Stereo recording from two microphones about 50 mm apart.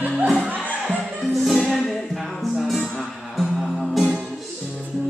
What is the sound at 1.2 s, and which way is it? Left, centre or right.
Music, centre.